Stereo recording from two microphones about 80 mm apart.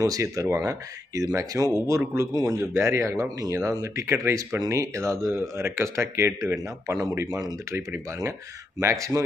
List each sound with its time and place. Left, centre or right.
0.0 s speech: right